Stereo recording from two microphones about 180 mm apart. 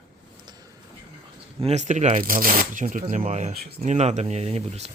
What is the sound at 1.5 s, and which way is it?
Speech, 35° right (ahead or behind).